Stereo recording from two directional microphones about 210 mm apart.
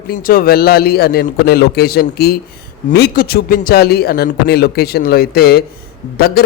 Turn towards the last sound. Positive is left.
turn(degrees=45)  # may be behind; listen again after turning